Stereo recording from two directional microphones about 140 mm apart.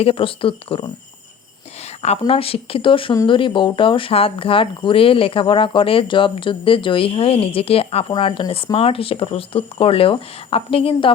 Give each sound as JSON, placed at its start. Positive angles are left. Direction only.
{"t": 0.0, "sound": "speech", "side_deg": 40}
{"t": 2.0, "sound": "speech", "side_deg": 45}